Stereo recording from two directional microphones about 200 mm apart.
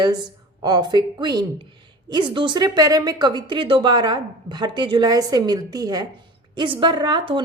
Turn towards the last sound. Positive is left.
turn(degrees=-25)  # may be behind; listen again after turning